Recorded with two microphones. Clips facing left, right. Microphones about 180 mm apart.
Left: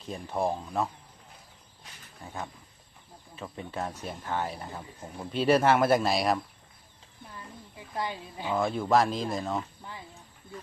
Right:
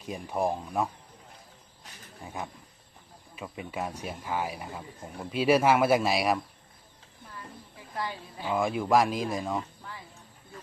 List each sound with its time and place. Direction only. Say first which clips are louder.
0.0 s speech: right 1 dB; 15° right (ahead or behind)
2.2 s speech: right 1 dB; 15° right (ahead or behind)
7.9 s speech: left 1 dB; 20° left (ahead or behind)
8.4 s speech: even; 10° right (ahead or behind)